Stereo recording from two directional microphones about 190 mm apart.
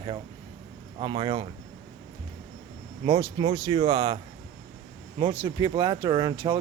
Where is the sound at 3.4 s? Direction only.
25° right (ahead or behind).